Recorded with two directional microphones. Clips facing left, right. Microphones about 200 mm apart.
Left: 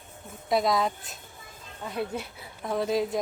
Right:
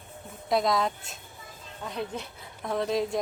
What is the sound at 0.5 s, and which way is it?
Speech, centre (ahead or behind).